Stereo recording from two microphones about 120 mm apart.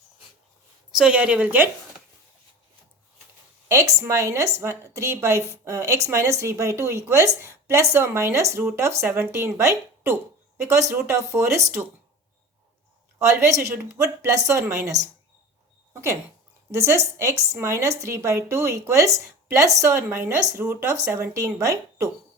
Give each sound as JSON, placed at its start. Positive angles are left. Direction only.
{"t": 0.9, "sound": "a woman's voice", "side_deg": -5}
{"t": 3.7, "sound": "speech", "side_deg": -25}
{"t": 13.5, "sound": "speech", "side_deg": -20}